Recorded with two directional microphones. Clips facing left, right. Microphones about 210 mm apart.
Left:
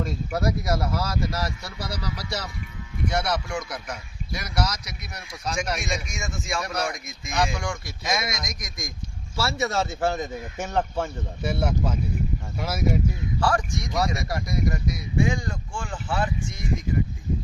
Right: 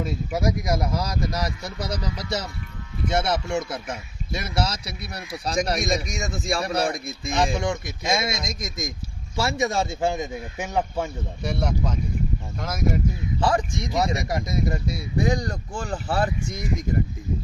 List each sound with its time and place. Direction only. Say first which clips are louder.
0.3 s speech: right 1 dB; 15° right (ahead or behind)
11.4 s speech: left 1 dB; 5° left (ahead or behind)
13.4 s speech: right 2 dB; 20° right (ahead or behind); by 16.6 s 40° right (ahead or behind)